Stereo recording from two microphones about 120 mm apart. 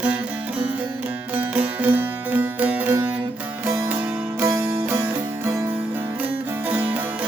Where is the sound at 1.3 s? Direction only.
15° right (ahead or behind).